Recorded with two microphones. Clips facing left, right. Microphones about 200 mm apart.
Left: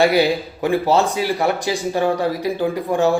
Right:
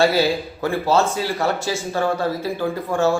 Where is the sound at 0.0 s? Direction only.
15° left (ahead or behind).